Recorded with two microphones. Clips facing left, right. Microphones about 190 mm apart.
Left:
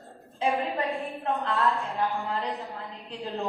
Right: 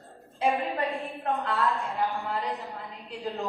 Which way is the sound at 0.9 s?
Centre (ahead or behind).